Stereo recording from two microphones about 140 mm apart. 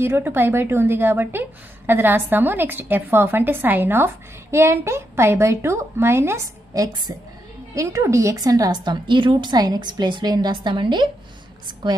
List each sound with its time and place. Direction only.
0.0 s a woman's voice: 15° right (ahead or behind); by 12.0 s 35° right (ahead or behind)